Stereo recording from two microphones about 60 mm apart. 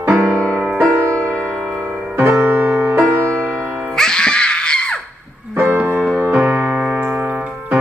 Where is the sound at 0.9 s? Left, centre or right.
Right.